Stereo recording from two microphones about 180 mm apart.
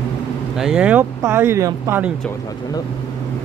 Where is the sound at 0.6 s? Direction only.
5° right (ahead or behind).